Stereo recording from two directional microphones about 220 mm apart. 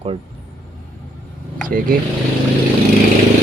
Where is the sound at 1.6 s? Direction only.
40° right (ahead or behind).